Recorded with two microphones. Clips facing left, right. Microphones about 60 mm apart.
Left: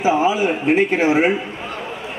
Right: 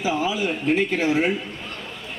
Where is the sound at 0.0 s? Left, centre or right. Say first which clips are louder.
Left 7 dB; left.